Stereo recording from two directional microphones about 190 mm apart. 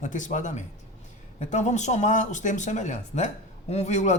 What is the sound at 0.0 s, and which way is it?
A man's voice, 40° left (ahead or behind).